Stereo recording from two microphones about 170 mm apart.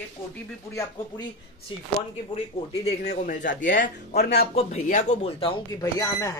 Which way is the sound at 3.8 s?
70° left (ahead or behind).